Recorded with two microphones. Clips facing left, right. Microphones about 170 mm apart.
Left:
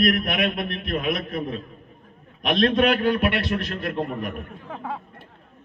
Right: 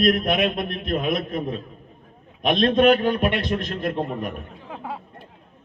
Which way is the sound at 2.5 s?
25° right (ahead or behind).